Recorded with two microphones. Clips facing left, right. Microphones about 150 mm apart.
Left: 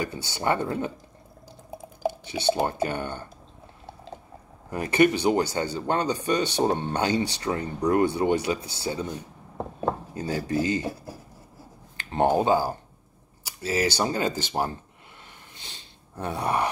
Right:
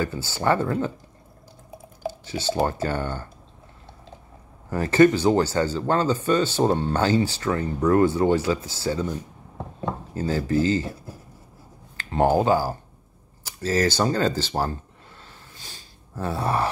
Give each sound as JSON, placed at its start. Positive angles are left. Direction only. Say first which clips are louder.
{"t": 0.0, "sound": "speech", "louder": "right 3 dB", "side_deg": 15}
{"t": 2.2, "sound": "speech", "louder": "right 2 dB", "side_deg": 15}
{"t": 4.6, "sound": "speech", "louder": "right 4 dB", "side_deg": 15}
{"t": 10.1, "sound": "speech", "louder": "right 4 dB", "side_deg": 15}
{"t": 12.0, "sound": "a sound", "louder": "right 2 dB", "side_deg": 25}
{"t": 12.4, "sound": "speech", "louder": "right 2 dB", "side_deg": 20}
{"t": 15.5, "sound": "gasp", "louder": "right 1 dB", "side_deg": 20}